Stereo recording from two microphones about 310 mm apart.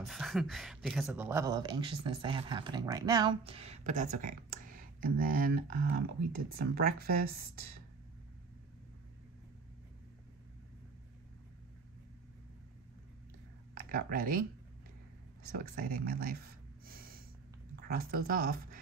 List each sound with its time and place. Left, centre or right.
0.0 s speech: centre; by 7.7 s right
13.7 s speech: right
15.4 s speech: right
16.8 s gasp: right
17.7 s speech: right